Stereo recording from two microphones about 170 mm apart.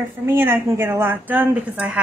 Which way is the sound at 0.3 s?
10° right (ahead or behind).